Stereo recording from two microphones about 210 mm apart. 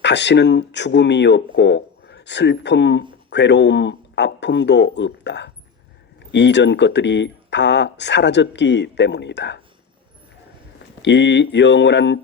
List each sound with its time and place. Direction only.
0.0 s speech: 55° left (ahead or behind)
11.0 s speech: 55° left (ahead or behind)